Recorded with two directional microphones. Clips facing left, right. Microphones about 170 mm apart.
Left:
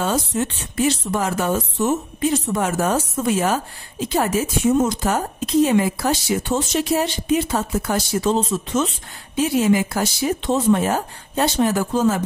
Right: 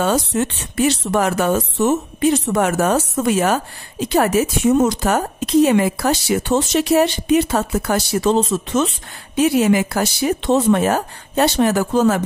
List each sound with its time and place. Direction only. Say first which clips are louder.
0.0 s speech: right 3 dB; 70° right (ahead or behind)